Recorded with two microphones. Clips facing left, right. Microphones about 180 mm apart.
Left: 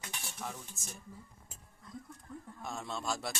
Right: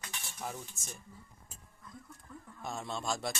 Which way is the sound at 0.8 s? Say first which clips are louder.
Even; centre (ahead or behind).